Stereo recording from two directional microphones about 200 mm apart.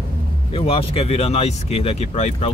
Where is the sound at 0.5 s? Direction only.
30° left (ahead or behind).